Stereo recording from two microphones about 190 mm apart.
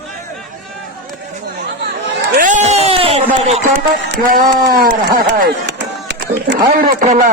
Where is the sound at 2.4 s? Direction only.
40° right (ahead or behind).